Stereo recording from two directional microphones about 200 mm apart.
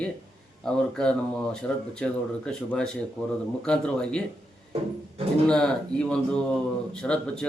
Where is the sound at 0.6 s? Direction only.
5° left (ahead or behind).